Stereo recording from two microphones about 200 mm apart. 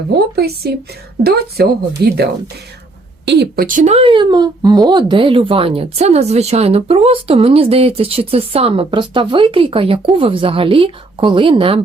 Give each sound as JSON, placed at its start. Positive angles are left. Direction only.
{"t": 0.3, "sound": "speech", "side_deg": -50}
{"t": 3.2, "sound": "speech", "side_deg": -55}